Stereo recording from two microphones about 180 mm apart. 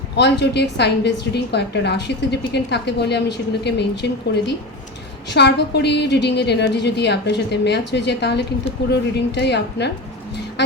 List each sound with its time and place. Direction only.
0.2 s a woman's voice: 70° left (ahead or behind)